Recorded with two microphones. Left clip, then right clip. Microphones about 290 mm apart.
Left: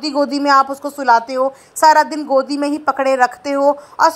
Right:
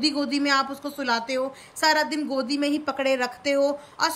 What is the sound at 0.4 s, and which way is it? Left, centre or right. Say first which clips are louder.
Speech: left 11 dB; left.